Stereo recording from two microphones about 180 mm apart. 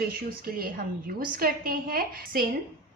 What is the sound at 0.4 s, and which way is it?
A woman's voice, 55° right (ahead or behind).